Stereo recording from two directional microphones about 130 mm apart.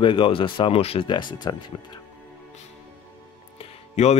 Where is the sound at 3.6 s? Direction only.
55° left (ahead or behind).